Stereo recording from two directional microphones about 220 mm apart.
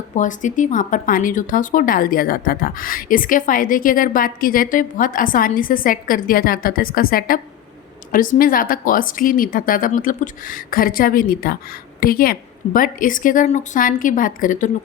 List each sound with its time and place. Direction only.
0.2 s speech: 35° left (ahead or behind)